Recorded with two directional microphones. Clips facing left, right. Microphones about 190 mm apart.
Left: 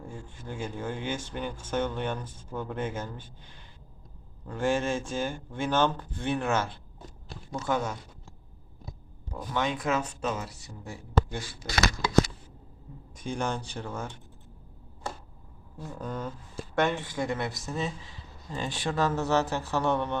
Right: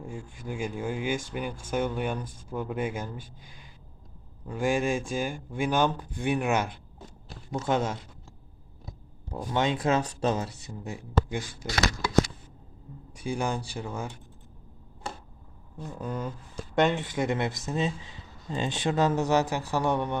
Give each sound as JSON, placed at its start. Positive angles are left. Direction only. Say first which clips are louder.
{"t": 0.0, "sound": "speech", "louder": "right 3 dB", "side_deg": -15}
{"t": 9.3, "sound": "speech", "louder": "right 3 dB", "side_deg": -25}
{"t": 13.1, "sound": "speech", "louder": "right 2 dB", "side_deg": -10}
{"t": 16.0, "sound": "speech", "louder": "right 2 dB", "side_deg": -10}
{"t": 16.7, "sound": "speech", "louder": "right 3 dB", "side_deg": -20}